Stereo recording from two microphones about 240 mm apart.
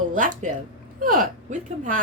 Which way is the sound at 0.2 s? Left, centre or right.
Right.